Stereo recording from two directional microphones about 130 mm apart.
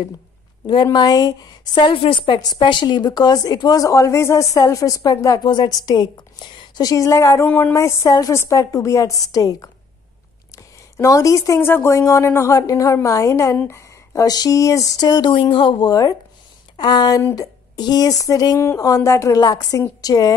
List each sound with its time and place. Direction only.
0.9 s a woman's voice: 30° left (ahead or behind)
7.4 s speech: 15° left (ahead or behind); by 15.9 s 40° left (ahead or behind)
15.9 s speech: 25° left (ahead or behind)